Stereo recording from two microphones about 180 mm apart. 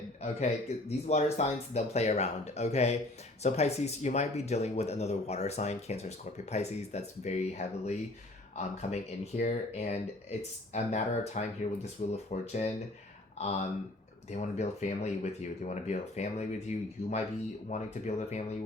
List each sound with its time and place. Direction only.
0.2 s speech: 35° left (ahead or behind)